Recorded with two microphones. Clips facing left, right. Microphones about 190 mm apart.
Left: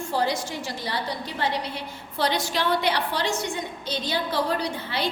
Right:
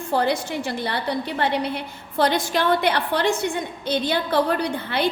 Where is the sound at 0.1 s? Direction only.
60° right (ahead or behind).